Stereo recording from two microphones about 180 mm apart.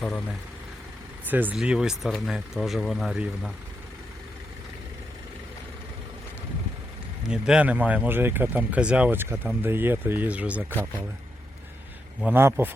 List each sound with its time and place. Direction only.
1.3 s speech: 10° right (ahead or behind)
7.3 s speech: 5° right (ahead or behind)
12.2 s speech: 10° right (ahead or behind)